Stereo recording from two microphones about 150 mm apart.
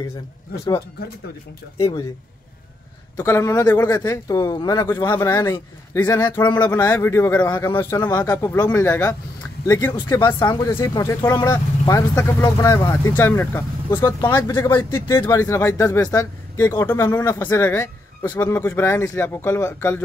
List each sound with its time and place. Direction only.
3.2 s speech: 20° left (ahead or behind)
5.0 s speech: 15° left (ahead or behind)
17.0 s speech: 10° left (ahead or behind)